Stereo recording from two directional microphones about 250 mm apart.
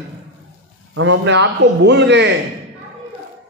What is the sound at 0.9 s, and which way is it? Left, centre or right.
A man's voice, right.